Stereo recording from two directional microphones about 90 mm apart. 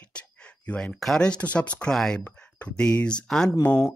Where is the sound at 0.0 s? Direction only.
15° left (ahead or behind).